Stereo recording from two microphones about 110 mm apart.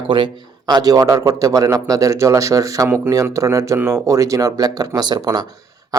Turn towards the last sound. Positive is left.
turn(degrees=-35)  # may be behind; listen again after turning